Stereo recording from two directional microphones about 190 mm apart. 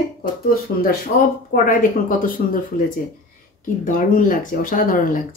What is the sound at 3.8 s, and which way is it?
Speech, 45° left (ahead or behind).